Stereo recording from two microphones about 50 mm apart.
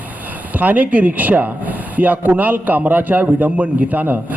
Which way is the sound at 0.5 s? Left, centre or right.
Right.